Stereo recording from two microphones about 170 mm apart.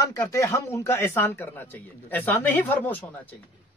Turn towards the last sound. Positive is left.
turn(degrees=10)  # may be behind; listen again after turning